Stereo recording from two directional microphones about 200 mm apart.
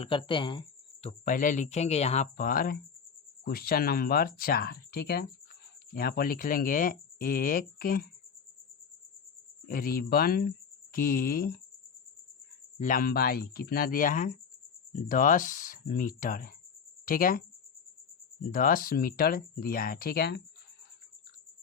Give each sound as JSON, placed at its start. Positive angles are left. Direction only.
{"t": 0.0, "sound": "speech", "side_deg": 25}
{"t": 1.2, "sound": "speech", "side_deg": 40}
{"t": 9.6, "sound": "speech", "side_deg": 45}
{"t": 12.8, "sound": "speech", "side_deg": 45}
{"t": 18.5, "sound": "speech", "side_deg": 45}